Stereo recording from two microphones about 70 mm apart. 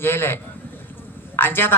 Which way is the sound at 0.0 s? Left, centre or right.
Left.